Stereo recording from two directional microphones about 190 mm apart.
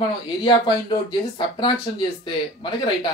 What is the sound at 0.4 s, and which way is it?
Speech, 20° left (ahead or behind).